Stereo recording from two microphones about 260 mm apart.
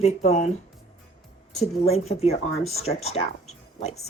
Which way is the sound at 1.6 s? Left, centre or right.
Left.